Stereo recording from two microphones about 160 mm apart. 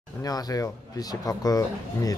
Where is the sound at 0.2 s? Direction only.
20° left (ahead or behind).